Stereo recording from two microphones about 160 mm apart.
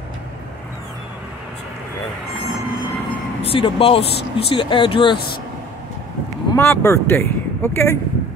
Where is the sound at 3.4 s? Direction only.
35° left (ahead or behind).